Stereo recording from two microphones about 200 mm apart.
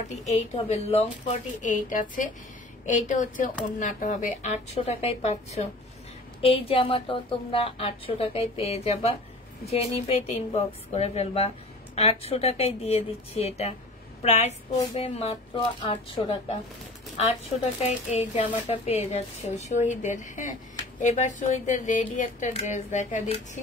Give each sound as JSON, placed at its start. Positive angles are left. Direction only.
{"t": 0.1, "sound": "a woman's voice", "side_deg": 35}
{"t": 17.8, "sound": "a woman's voice", "side_deg": 30}